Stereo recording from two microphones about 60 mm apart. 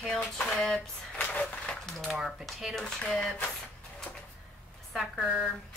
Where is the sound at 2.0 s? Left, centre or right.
Centre.